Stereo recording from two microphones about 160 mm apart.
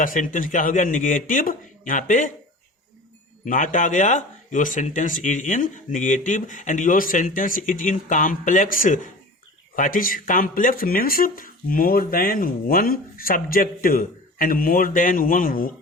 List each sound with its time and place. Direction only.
0.0 s speech: 55° left (ahead or behind)
3.4 s speech: 55° left (ahead or behind)